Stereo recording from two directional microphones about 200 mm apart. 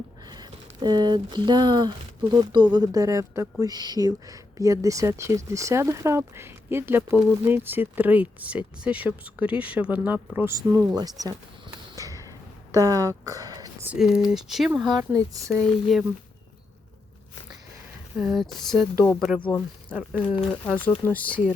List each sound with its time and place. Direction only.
0.3 s speech: 20° right (ahead or behind)
11.9 s a sound: 15° right (ahead or behind)
12.7 s speech: 15° right (ahead or behind)
13.8 s speech: 5° right (ahead or behind)
14.9 s speech: 15° right (ahead or behind)
15.4 s speech: 5° left (ahead or behind)
18.2 s speech: centre (ahead or behind)
20.1 s speech: 25° left (ahead or behind)
20.8 s speech: 10° left (ahead or behind)